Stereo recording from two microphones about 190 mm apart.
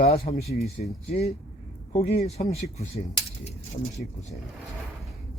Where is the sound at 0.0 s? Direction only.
35° left (ahead or behind).